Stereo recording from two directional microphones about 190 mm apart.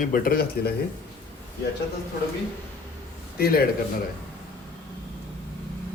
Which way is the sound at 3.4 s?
55° left (ahead or behind).